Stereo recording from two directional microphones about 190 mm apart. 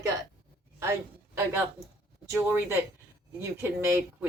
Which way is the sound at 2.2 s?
15° right (ahead or behind).